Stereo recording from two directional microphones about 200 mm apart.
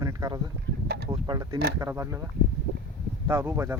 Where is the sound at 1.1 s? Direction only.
15° right (ahead or behind).